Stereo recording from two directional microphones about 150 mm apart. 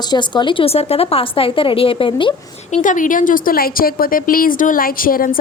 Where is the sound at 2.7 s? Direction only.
60° left (ahead or behind).